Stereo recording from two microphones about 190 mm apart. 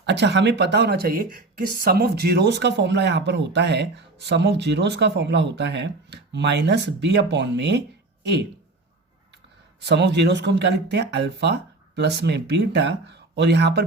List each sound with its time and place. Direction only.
0.0 s speech: 65° right (ahead or behind)
9.8 s speech: 65° right (ahead or behind)